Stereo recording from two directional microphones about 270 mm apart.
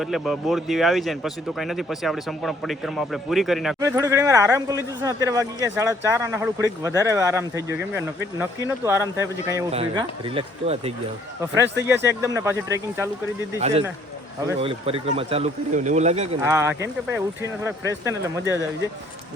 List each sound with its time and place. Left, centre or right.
0.0 s speech: centre
3.8 s speech: centre
12.0 s speech: centre
13.6 s speech: right
16.4 s speech: centre